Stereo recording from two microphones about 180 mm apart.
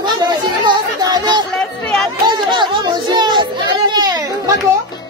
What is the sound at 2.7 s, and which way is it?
Music, 25° right (ahead or behind).